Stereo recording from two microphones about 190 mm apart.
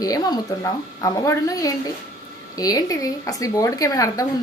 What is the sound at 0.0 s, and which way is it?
A woman's voice, 20° left (ahead or behind).